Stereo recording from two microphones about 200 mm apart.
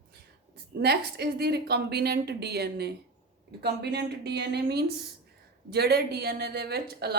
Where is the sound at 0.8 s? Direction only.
55° right (ahead or behind).